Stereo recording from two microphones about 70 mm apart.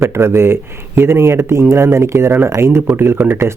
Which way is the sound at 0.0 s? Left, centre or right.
Right.